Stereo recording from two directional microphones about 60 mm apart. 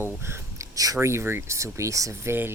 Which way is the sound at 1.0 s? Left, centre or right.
Right.